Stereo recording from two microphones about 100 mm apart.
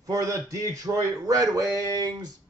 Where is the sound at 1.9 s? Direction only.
45° right (ahead or behind).